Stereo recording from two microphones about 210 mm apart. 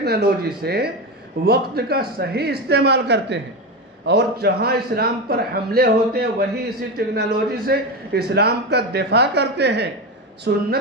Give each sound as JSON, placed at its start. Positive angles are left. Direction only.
{"t": 0.0, "sound": "a man's voice", "side_deg": -50}